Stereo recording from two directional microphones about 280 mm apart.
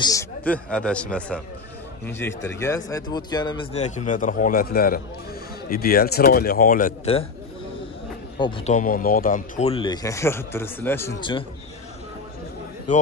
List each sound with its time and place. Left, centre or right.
0.0 s speech: centre
8.4 s speech: centre